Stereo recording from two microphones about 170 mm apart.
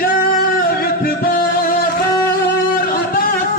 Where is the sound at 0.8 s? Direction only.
60° left (ahead or behind).